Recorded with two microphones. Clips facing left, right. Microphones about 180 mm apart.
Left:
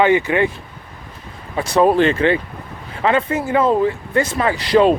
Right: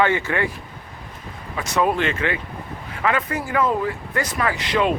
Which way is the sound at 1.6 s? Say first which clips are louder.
Left 7 dB; 35° left (ahead or behind).